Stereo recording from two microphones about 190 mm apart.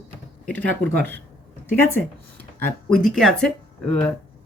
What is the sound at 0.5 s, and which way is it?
Speech, 70° right (ahead or behind).